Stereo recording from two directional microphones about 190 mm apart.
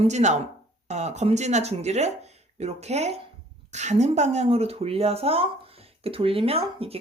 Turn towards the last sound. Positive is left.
turn(degrees=-30)  # may be behind; listen again after turning